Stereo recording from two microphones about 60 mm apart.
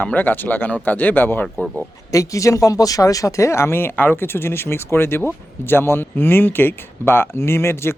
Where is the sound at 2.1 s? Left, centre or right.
Left.